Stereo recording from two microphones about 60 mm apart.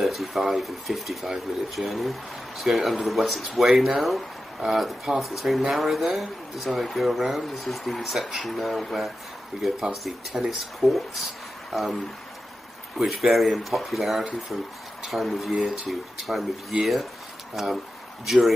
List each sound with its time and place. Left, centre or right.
0.0 s speech: centre